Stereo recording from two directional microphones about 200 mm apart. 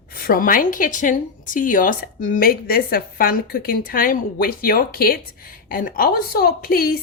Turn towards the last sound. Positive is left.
turn(degrees=50)  # may be behind; listen again after turning